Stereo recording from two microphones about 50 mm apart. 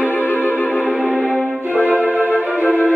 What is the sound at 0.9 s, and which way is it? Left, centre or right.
Music, centre.